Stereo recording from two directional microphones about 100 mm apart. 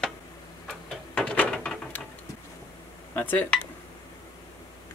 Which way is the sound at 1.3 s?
10° left (ahead or behind).